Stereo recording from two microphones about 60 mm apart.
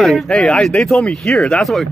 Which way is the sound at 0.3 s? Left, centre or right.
Centre.